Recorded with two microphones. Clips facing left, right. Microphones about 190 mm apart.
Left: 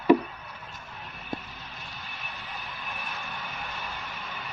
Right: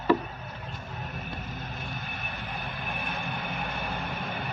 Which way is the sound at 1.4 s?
50° right (ahead or behind).